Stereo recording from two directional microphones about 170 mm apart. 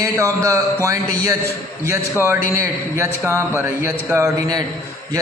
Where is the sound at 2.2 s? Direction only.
15° right (ahead or behind).